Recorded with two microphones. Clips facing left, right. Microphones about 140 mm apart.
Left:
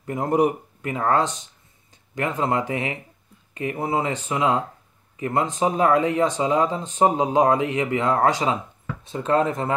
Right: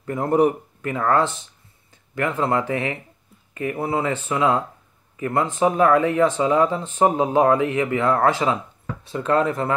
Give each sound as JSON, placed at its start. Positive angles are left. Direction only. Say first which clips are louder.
{"t": 0.8, "sound": "speech", "louder": "right 1 dB", "side_deg": 25}